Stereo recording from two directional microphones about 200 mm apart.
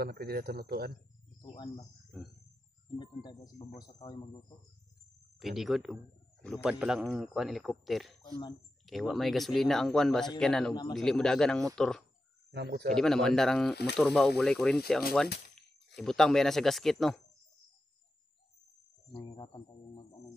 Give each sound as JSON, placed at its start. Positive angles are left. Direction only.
{"t": 0.0, "sound": "speech", "side_deg": -50}
{"t": 1.4, "sound": "speech", "side_deg": 25}
{"t": 3.0, "sound": "speech", "side_deg": 20}
{"t": 5.4, "sound": "a man's voice", "side_deg": 0}
{"t": 8.2, "sound": "speech", "side_deg": 20}
{"t": 8.8, "sound": "a man's voice", "side_deg": 0}
{"t": 12.4, "sound": "a man's voice", "side_deg": -55}
{"t": 12.9, "sound": "a man's voice", "side_deg": 0}
{"t": 19.1, "sound": "speech", "side_deg": 25}